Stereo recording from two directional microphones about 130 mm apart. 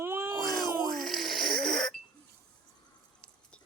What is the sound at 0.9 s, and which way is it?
Music, centre (ahead or behind).